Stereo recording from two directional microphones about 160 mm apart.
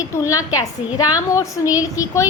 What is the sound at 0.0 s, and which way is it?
A woman's voice, 20° left (ahead or behind).